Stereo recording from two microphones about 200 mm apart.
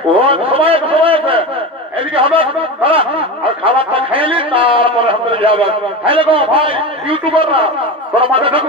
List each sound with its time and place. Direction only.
0.1 s a man's voice: 25° right (ahead or behind)